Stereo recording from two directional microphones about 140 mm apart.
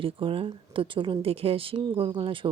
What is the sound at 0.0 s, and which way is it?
Speech, 40° right (ahead or behind).